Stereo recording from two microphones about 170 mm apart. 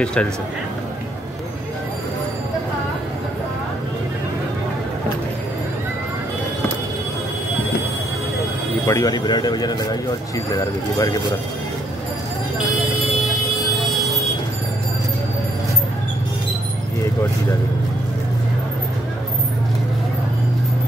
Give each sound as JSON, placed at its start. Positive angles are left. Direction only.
{"t": 0.0, "sound": "a man's voice", "side_deg": 5}
{"t": 8.8, "sound": "speech", "side_deg": 20}